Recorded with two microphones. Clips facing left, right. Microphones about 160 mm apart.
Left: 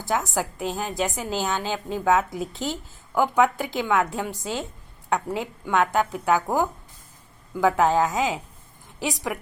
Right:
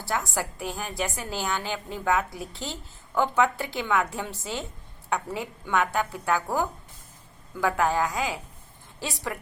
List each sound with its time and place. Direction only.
0.0 s a woman's voice: 20° left (ahead or behind)